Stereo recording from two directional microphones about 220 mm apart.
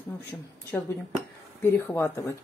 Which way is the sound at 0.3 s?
10° left (ahead or behind).